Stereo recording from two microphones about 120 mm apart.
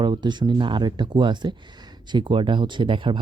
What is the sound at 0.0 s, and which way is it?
Speech, 40° right (ahead or behind).